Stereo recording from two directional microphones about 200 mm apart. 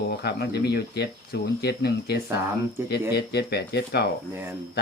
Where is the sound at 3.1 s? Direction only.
55° left (ahead or behind).